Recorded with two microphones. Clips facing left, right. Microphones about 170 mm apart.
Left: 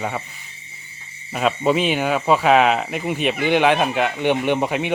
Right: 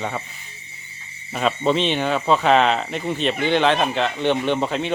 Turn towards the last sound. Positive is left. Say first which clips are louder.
# left 1 dB
turn(degrees=15)  # may be behind; listen again after turning